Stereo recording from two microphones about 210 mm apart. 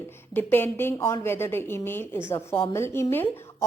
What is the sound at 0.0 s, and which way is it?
A woman's voice, 10° left (ahead or behind).